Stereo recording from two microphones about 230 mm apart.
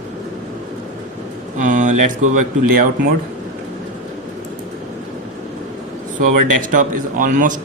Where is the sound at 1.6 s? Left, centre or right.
Right.